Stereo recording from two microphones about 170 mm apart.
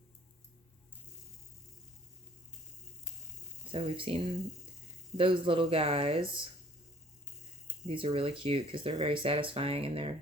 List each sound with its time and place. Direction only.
3.7 s speech: 35° right (ahead or behind)
7.9 s speech: 35° right (ahead or behind)